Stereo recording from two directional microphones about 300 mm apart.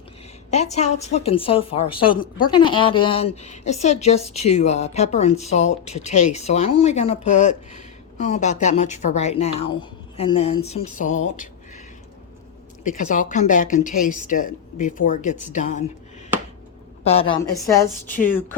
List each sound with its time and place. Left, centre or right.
0.5 s a woman's voice: left
12.8 s a woman's voice: left
17.0 s a woman's voice: centre
18.1 s a woman's voice: left